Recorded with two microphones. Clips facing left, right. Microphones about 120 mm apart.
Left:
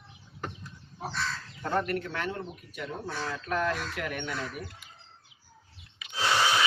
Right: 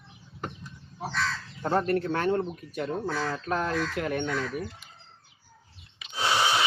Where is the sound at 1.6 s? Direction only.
30° right (ahead or behind).